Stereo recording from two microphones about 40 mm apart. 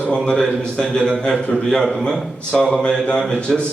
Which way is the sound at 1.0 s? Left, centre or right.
Left.